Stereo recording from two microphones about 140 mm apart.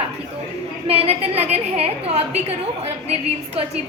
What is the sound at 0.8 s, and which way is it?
A woman's voice, 45° right (ahead or behind).